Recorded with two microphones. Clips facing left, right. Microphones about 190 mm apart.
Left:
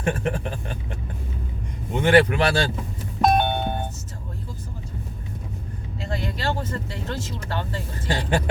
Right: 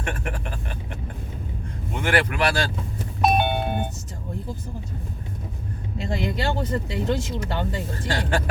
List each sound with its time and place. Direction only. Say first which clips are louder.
0.0 s speech: left 6 dB; 25° left (ahead or behind)
1.9 s speech: left 6 dB; 25° left (ahead or behind)
3.2 s doorbell: left 1 dB; 10° right (ahead or behind)
6.2 s speech: right 2 dB; 15° right (ahead or behind)
8.0 s speech: left 2 dB; 20° left (ahead or behind)